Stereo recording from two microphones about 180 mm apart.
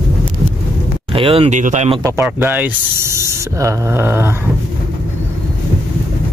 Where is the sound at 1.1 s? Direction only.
30° right (ahead or behind).